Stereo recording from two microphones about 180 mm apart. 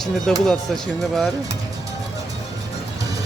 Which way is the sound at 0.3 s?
Centre (ahead or behind).